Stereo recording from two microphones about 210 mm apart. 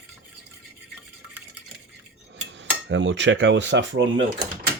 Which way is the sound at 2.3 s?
55° right (ahead or behind).